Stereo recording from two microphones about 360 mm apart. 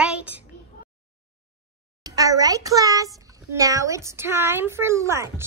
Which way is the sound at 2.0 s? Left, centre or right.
Centre.